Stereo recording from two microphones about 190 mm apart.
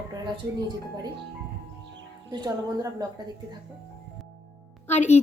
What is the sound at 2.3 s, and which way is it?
Speech, 20° right (ahead or behind).